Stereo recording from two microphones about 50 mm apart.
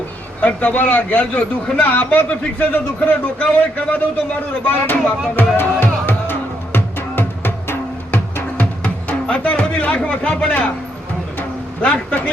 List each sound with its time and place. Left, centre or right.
0.4 s a man's voice: left
5.5 s music: left
8.1 s music: left
9.2 s speech: left
11.3 s music: left